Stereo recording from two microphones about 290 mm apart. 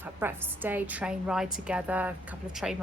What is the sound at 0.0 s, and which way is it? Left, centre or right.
A woman's voice, centre.